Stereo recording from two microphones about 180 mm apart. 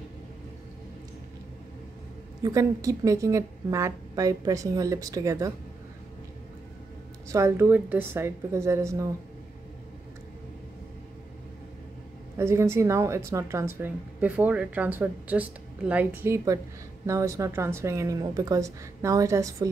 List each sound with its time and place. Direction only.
2.4 s speech: 20° right (ahead or behind)
7.2 s speech: 15° right (ahead or behind)
12.4 s speech: 15° right (ahead or behind)